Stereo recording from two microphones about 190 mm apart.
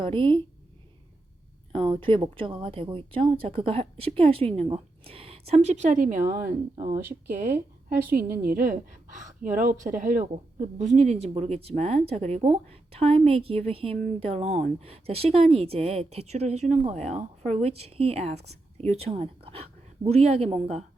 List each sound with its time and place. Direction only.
0.0 s a woman's voice: 25° right (ahead or behind)
1.7 s a woman's voice: 25° right (ahead or behind); by 6.9 s 45° right (ahead or behind)
8.1 s a woman's voice: 50° right (ahead or behind); by 20.8 s 35° right (ahead or behind)